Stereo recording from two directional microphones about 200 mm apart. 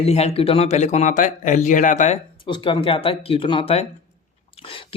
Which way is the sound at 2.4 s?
25° left (ahead or behind).